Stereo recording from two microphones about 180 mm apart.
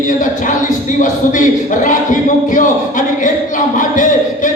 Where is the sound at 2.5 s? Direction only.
45° left (ahead or behind).